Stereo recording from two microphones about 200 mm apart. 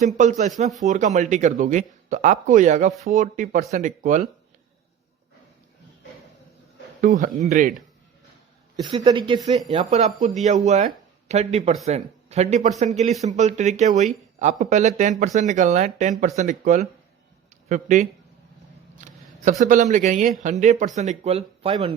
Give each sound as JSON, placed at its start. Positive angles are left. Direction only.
{"t": 0.0, "sound": "speech", "side_deg": -40}
{"t": 7.0, "sound": "speech", "side_deg": -40}
{"t": 8.7, "sound": "speech", "side_deg": -20}